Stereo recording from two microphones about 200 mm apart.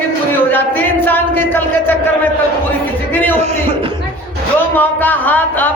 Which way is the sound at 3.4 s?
35° right (ahead or behind).